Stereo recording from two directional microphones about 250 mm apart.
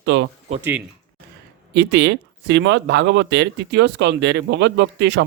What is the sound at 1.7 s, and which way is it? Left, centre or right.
Speech, right.